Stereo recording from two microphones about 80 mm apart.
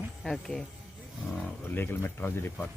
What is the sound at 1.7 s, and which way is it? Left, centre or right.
Speech, left.